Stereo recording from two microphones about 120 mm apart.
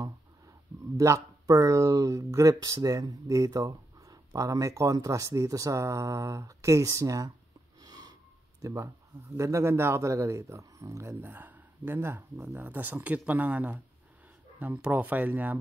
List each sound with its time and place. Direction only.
0.9 s speech: 25° right (ahead or behind)
7.8 s a sound: 35° right (ahead or behind)
8.6 s speech: 25° right (ahead or behind)